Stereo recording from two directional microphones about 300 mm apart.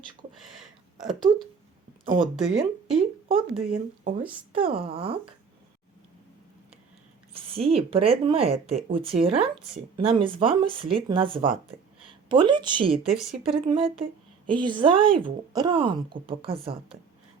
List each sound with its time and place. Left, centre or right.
0.3 s a sound: centre
2.2 s speech: centre
3.2 s speech: centre
4.2 s speech: centre
4.6 s speech: centre
7.3 s speech: centre